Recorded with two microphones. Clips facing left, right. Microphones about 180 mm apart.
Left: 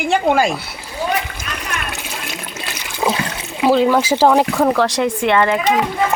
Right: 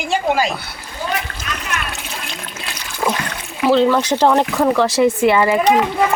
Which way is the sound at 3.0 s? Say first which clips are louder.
Left 1 dB; 10° left (ahead or behind).